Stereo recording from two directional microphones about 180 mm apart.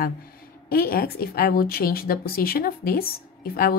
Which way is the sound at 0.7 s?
55° left (ahead or behind).